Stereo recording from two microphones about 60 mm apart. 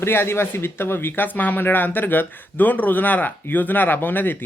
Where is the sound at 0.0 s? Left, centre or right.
Left.